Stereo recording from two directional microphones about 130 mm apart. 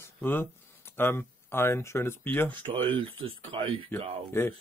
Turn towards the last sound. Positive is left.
turn(degrees=15)  # may be behind; listen again after turning